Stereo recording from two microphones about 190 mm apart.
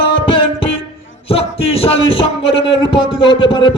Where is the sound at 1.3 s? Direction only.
30° left (ahead or behind).